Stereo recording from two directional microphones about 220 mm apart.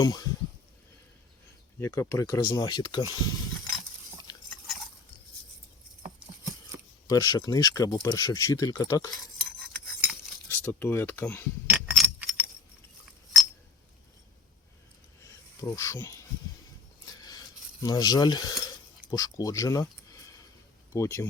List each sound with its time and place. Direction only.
0.0 s speech: 20° left (ahead or behind)
1.8 s speech: 15° left (ahead or behind)
7.1 s speech: 15° left (ahead or behind)
9.1 s stir: centre (ahead or behind)
10.5 s speech: 10° left (ahead or behind)
11.7 s keys jangling: 5° right (ahead or behind)
15.3 s snake: 15° left (ahead or behind)
17.2 s cutlery: 15° left (ahead or behind)
19.0 s speech: 15° left (ahead or behind)